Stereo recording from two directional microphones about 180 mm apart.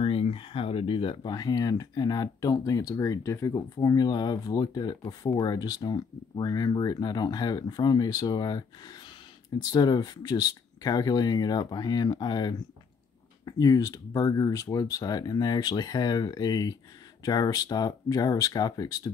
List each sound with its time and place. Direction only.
0.0 s speech: 30° left (ahead or behind)